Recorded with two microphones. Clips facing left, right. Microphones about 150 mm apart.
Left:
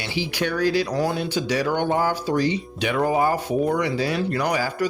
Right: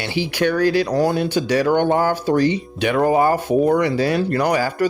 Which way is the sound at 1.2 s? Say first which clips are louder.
Right 5 dB; 55° right (ahead or behind).